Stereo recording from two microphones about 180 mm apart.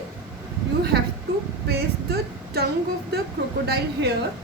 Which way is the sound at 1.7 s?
60° right (ahead or behind).